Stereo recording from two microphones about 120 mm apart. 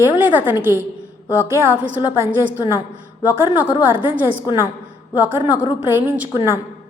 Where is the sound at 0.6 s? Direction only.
20° right (ahead or behind).